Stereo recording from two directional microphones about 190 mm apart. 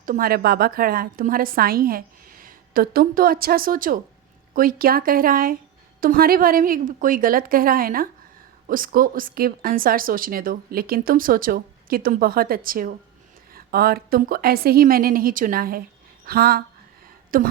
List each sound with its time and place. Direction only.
0.0 s a woman's voice: 50° right (ahead or behind)